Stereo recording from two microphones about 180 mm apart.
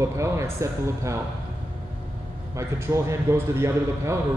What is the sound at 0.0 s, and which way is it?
A man's voice, 15° right (ahead or behind).